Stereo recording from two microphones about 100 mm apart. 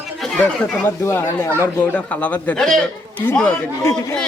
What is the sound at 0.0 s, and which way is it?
Chatter, centre (ahead or behind).